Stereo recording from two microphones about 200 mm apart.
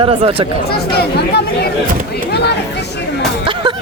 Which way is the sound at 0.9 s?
55° left (ahead or behind).